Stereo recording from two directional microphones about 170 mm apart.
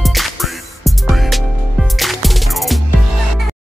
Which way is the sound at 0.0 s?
Centre (ahead or behind).